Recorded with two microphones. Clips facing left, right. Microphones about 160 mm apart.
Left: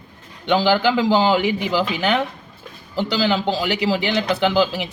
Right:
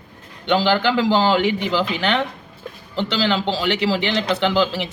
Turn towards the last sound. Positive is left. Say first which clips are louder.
# left 1 dB
turn(degrees=5)  # may be behind; listen again after turning